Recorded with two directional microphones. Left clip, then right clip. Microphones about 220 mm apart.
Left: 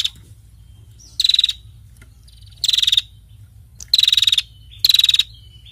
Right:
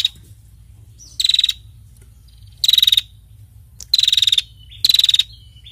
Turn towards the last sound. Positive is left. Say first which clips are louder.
# even
turn(degrees=15)  # may be behind; listen again after turning